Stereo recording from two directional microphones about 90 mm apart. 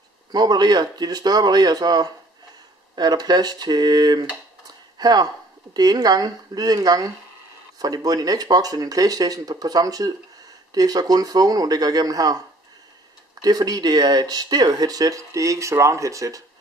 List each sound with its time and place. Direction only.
0.3 s speech: 50° right (ahead or behind)